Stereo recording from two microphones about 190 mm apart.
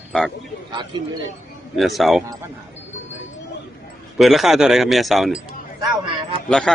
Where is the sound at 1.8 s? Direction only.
Centre (ahead or behind).